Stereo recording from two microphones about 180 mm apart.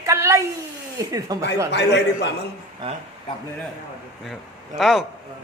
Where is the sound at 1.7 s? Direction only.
70° left (ahead or behind).